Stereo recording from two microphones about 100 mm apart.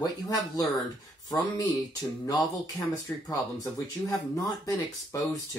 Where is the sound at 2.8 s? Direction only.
35° left (ahead or behind).